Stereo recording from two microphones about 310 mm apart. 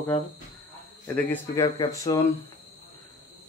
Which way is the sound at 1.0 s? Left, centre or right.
Centre.